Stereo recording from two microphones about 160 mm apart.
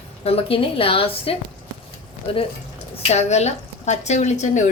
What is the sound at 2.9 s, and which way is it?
A woman's voice, 45° left (ahead or behind).